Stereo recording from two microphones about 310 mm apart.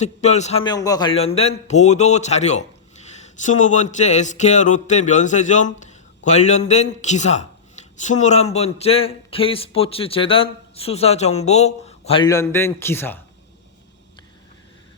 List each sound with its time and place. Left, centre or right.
0.0 s a man's voice: left